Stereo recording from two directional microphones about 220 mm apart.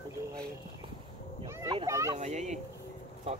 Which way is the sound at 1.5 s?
15° right (ahead or behind).